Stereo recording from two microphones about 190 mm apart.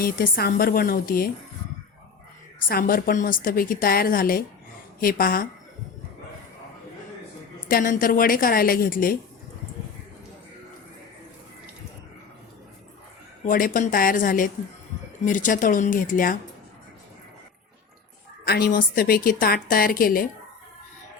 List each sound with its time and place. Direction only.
0.0 s a woman's voice: 50° left (ahead or behind)
2.6 s a woman's voice: 50° left (ahead or behind)
7.7 s a woman's voice: 45° left (ahead or behind)
13.4 s a woman's voice: 45° left (ahead or behind)
18.4 s a woman's voice: 55° left (ahead or behind)